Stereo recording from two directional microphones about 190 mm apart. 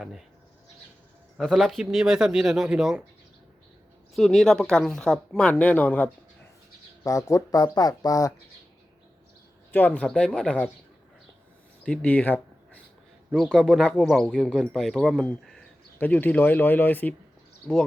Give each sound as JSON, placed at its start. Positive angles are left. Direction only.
{"t": 0.0, "sound": "speech", "side_deg": 0}
{"t": 1.4, "sound": "speech", "side_deg": 0}
{"t": 4.1, "sound": "speech", "side_deg": 0}
{"t": 9.7, "sound": "speech", "side_deg": 10}
{"t": 11.8, "sound": "speech", "side_deg": 5}